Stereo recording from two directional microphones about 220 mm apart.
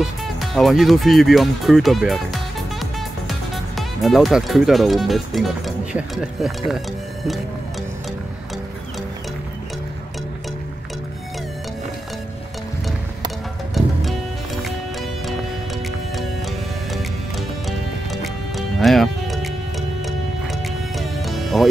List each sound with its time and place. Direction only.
0.0 s speech: centre (ahead or behind)
13.7 s music: centre (ahead or behind)
16.9 s music: centre (ahead or behind)